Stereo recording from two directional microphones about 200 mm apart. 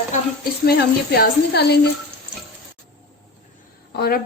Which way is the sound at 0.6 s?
50° left (ahead or behind).